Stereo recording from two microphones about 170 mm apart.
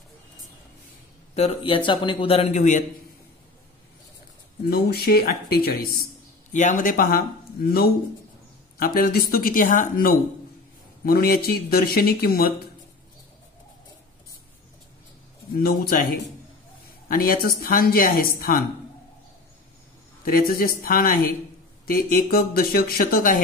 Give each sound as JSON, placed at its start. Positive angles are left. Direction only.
{"t": 1.3, "sound": "a man's voice", "side_deg": 35}
{"t": 4.6, "sound": "speech", "side_deg": 65}
{"t": 6.5, "sound": "speech", "side_deg": 50}
{"t": 8.7, "sound": "speech", "side_deg": 60}
{"t": 15.6, "sound": "speech", "side_deg": 65}
{"t": 20.2, "sound": "speech", "side_deg": 60}